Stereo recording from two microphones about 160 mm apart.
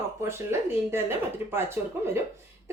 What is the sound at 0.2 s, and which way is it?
A woman's voice, 15° right (ahead or behind).